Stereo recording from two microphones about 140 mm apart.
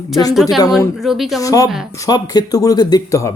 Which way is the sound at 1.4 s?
25° left (ahead or behind).